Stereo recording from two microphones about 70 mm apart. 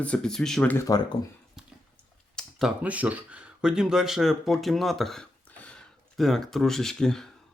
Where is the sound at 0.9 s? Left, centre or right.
Left.